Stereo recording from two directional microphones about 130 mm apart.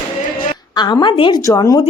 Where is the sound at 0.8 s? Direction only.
35° left (ahead or behind).